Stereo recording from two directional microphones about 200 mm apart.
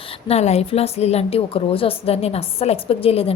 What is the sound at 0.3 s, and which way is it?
A woman's voice, 30° left (ahead or behind).